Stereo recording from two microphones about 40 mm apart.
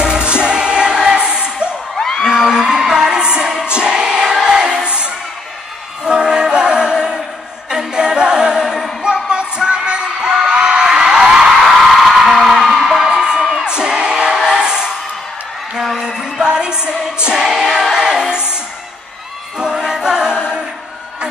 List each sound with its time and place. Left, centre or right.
0.0 s music: right
2.0 s whoop: centre
2.2 s whoop: centre
2.8 s music: centre
7.7 s singing: centre
9.0 s a sound: right
11.6 s a sound: centre
12.4 s music: centre
13.4 s music: centre
13.7 s music: right
16.0 s music: centre
19.6 s music: centre